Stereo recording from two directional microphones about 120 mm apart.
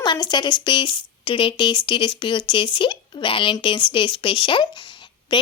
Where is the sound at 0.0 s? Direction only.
40° left (ahead or behind).